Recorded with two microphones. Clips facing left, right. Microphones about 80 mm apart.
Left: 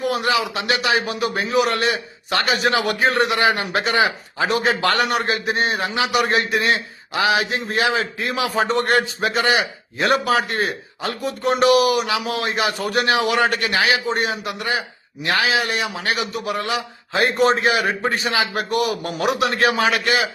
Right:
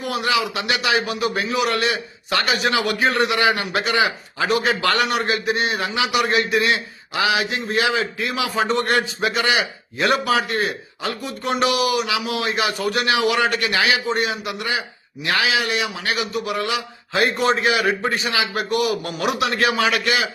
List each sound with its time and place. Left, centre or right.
0.0 s a man's voice: left